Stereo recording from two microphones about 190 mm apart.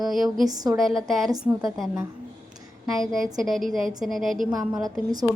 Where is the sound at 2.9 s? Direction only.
Centre (ahead or behind).